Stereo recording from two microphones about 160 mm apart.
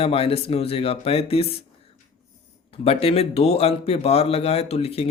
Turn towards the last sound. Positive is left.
turn(degrees=40)  # may be behind; listen again after turning